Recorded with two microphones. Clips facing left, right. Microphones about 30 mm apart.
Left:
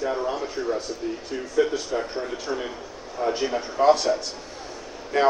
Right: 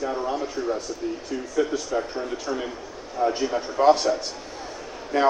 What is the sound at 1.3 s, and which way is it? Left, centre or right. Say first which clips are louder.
Speech: left 2 dB; centre.